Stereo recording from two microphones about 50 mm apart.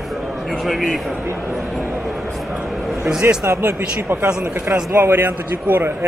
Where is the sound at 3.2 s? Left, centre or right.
Right.